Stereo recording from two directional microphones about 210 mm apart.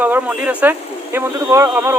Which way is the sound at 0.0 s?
10° right (ahead or behind).